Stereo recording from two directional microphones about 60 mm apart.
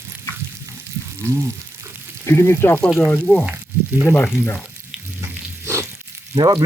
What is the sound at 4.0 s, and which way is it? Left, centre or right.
Speech, left.